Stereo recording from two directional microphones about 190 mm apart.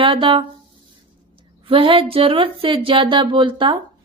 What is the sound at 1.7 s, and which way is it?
Speech, 30° right (ahead or behind).